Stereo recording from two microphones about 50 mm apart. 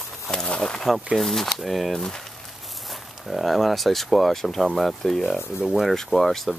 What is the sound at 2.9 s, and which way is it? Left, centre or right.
Speech, centre.